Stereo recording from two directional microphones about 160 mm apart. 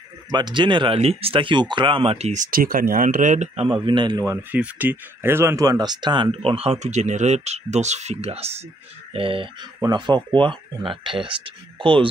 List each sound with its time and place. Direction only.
0.3 s a man's voice: 30° right (ahead or behind); by 3.6 s 50° right (ahead or behind)
3.6 s a man's voice: 30° right (ahead or behind)